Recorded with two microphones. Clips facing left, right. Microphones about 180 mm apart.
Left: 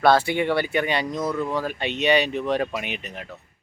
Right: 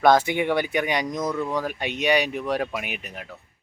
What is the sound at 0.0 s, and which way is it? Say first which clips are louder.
Speech: even; 15° right (ahead or behind).